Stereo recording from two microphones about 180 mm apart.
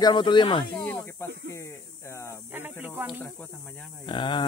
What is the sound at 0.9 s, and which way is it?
Snake, 15° left (ahead or behind).